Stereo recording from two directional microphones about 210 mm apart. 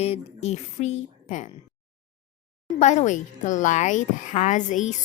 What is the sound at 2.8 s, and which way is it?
Speech, 35° left (ahead or behind).